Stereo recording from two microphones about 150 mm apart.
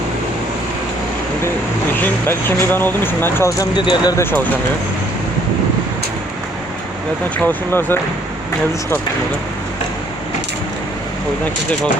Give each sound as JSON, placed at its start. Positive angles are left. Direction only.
{"t": 2.0, "sound": "speech", "side_deg": 15}
{"t": 3.8, "sound": "speech", "side_deg": 30}
{"t": 4.2, "sound": "speech", "side_deg": 15}
{"t": 7.4, "sound": "speech", "side_deg": 15}